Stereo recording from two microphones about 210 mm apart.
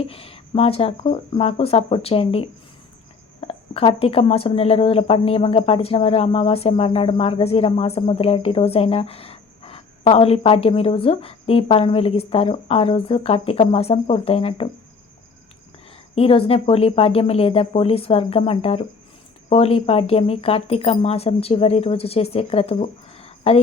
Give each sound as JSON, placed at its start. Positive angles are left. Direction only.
{"t": 0.0, "sound": "speech", "side_deg": 25}
{"t": 16.1, "sound": "speech", "side_deg": 25}